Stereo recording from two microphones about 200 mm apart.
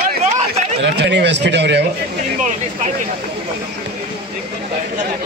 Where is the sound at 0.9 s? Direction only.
60° right (ahead or behind).